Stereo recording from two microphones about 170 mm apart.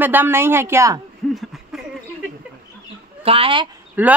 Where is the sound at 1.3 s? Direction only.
Centre (ahead or behind).